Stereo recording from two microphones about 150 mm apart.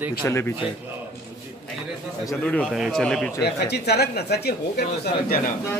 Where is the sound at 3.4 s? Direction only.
90° left.